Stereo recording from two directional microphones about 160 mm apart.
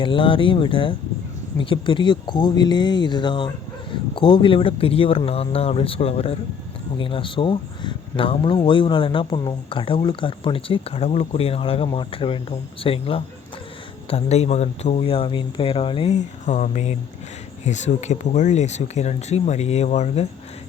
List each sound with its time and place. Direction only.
0.0 s speech: 30° left (ahead or behind)